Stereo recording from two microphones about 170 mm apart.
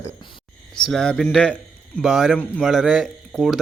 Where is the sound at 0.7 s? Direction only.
5° left (ahead or behind).